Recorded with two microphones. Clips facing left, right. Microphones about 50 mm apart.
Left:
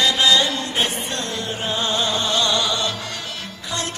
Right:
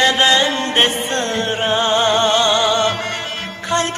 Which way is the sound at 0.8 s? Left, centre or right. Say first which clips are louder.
Right 8 dB; right.